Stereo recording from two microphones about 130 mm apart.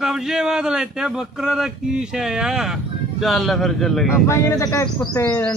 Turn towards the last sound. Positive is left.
turn(degrees=25)  # may be behind; listen again after turning